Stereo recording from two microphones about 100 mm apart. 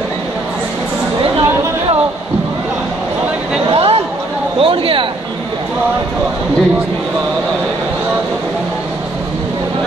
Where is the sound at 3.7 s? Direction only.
70° right (ahead or behind).